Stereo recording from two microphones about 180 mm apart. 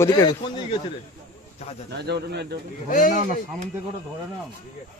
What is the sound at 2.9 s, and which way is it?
Speech, 50° left (ahead or behind).